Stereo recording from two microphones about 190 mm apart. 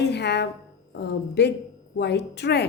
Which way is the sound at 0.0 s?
65° left (ahead or behind).